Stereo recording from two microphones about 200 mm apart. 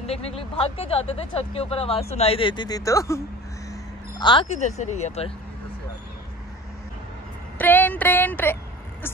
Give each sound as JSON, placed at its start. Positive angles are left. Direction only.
{"t": 0.0, "sound": "speech", "side_deg": 30}
{"t": 4.2, "sound": "speech", "side_deg": 25}
{"t": 7.5, "sound": "speech", "side_deg": 10}